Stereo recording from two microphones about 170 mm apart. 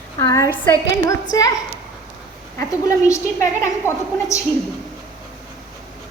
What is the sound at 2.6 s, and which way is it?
A woman's voice, 20° left (ahead or behind).